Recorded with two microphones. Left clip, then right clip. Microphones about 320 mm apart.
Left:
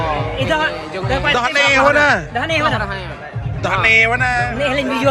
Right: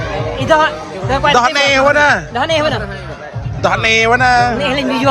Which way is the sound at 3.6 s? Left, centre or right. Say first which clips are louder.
Right 1 dB; centre.